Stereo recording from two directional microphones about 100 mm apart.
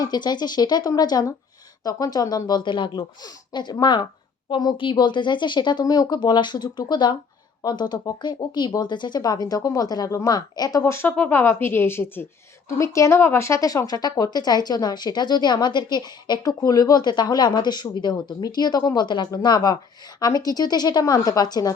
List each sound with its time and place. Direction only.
0.0 s speech: 45° left (ahead or behind)